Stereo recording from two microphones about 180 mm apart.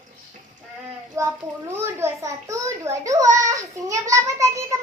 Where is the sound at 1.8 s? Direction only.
15° right (ahead or behind).